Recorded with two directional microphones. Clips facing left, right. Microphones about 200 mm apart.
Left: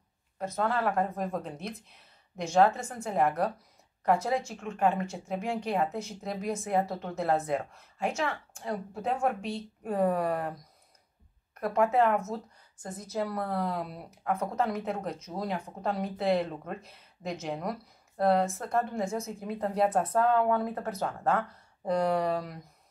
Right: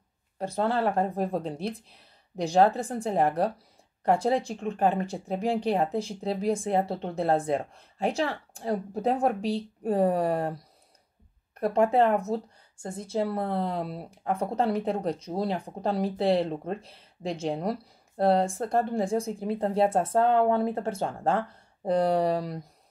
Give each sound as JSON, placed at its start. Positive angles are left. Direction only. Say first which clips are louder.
{"t": 0.4, "sound": "speech", "louder": "right 3 dB", "side_deg": -30}
{"t": 11.6, "sound": "speech", "louder": "right 3 dB", "side_deg": -30}